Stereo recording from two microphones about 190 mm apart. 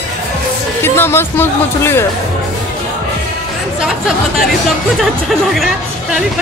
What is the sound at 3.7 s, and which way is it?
Chatter, 5° right (ahead or behind).